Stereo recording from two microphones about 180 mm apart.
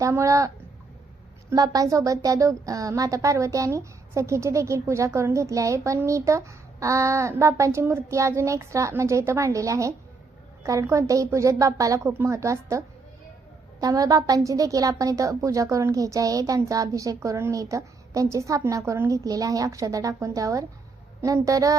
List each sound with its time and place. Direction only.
0.0 s speech: 15° right (ahead or behind)
13.8 s a woman's voice: 20° right (ahead or behind)